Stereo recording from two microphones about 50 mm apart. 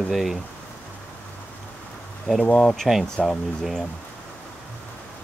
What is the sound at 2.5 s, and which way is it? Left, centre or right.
Speech, centre.